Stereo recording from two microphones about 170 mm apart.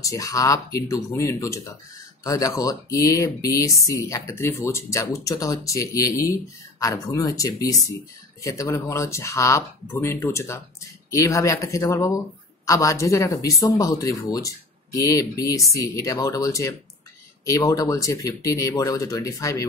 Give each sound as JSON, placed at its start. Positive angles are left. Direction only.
{"t": 0.0, "sound": "speech", "side_deg": 20}